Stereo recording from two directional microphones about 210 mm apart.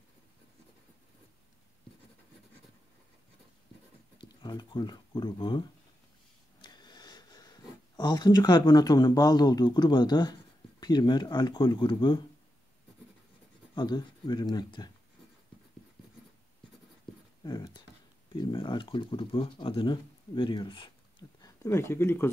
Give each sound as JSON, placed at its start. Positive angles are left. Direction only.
{"t": 4.2, "sound": "speech", "side_deg": 20}
{"t": 13.7, "sound": "speech", "side_deg": 20}
{"t": 17.4, "sound": "a sound", "side_deg": 20}
{"t": 18.3, "sound": "speech", "side_deg": 20}